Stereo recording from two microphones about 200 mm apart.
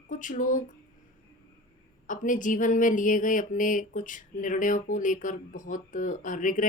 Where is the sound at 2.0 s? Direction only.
40° left (ahead or behind).